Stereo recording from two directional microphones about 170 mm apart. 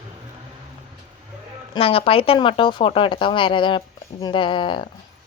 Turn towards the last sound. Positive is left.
turn(degrees=30)  # may be behind; listen again after turning